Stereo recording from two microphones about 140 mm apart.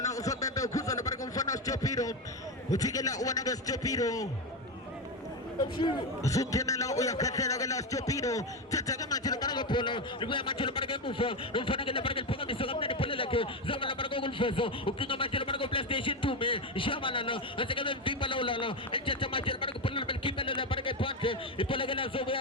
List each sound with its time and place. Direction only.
0.0 s a sound: 25° left (ahead or behind)
2.6 s a man's voice: 25° left (ahead or behind)
6.2 s a man's voice: 25° left (ahead or behind); by 22.4 s 40° left (ahead or behind)